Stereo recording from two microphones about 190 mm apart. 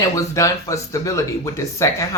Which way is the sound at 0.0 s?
15° left (ahead or behind).